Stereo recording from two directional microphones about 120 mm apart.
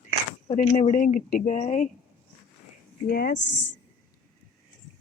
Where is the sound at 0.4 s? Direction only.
75° left (ahead or behind).